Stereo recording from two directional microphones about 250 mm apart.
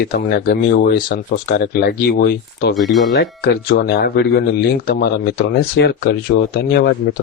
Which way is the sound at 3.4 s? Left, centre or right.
Left.